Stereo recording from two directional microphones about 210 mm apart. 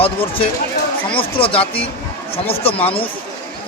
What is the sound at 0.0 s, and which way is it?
A man's voice, 25° left (ahead or behind).